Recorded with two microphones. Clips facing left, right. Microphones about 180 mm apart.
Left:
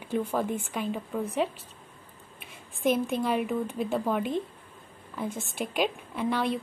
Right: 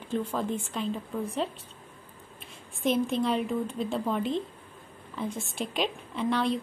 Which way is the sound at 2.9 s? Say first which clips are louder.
Even; 55° left (ahead or behind).